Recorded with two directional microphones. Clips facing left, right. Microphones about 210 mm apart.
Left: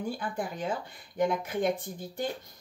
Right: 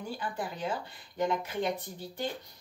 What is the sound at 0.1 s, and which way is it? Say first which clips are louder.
Speech: left 2 dB; 50° left (ahead or behind).